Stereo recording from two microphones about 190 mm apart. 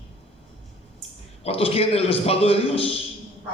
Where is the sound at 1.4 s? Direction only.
30° left (ahead or behind).